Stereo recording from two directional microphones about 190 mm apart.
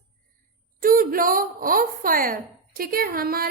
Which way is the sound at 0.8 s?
50° right (ahead or behind).